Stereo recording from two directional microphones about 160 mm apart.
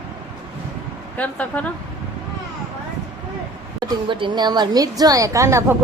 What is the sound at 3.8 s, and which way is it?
A woman's voice, 30° right (ahead or behind).